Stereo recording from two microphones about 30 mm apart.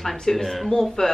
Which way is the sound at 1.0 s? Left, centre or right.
Left.